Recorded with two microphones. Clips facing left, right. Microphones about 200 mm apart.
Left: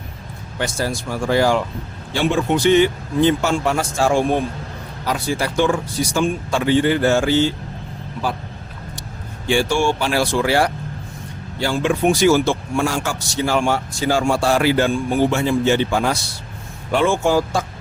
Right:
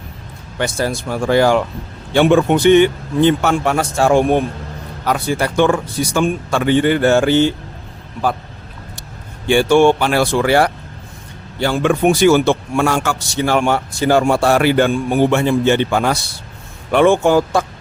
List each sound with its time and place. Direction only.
0.6 s a man's voice: 60° right (ahead or behind)
9.5 s a man's voice: 60° right (ahead or behind)